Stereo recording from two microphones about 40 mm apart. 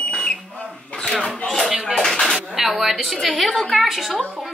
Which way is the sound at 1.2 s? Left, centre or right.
Centre.